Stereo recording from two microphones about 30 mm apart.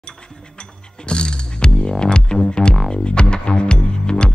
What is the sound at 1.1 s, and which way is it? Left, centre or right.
Music, left.